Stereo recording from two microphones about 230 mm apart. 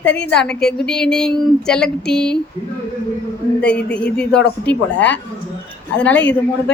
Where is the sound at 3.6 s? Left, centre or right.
Centre.